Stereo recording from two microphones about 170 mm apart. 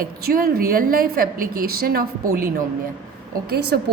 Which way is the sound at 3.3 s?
65° right (ahead or behind).